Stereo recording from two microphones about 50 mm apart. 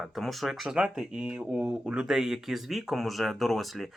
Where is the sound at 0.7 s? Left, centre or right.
Centre.